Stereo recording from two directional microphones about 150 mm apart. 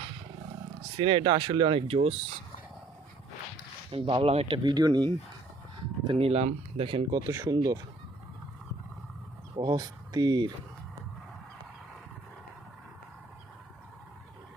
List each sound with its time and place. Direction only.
0.9 s speech: 35° right (ahead or behind)
3.9 s speech: 40° right (ahead or behind)
6.1 s speech: 40° right (ahead or behind)
7.3 s speech: 25° right (ahead or behind)
9.6 s speech: 25° right (ahead or behind)